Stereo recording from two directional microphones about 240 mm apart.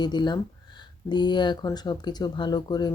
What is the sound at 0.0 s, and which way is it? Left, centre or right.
Speech, centre.